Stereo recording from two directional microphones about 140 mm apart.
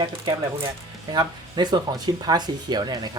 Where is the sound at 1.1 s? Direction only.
30° right (ahead or behind).